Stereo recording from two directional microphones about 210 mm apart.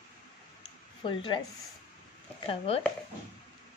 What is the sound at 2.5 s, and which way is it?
Speech, 30° left (ahead or behind).